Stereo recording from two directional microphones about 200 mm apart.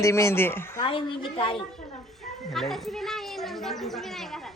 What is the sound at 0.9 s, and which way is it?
Speech, 25° left (ahead or behind).